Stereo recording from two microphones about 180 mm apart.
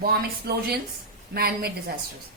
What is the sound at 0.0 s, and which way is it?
A woman's voice, 60° right (ahead or behind).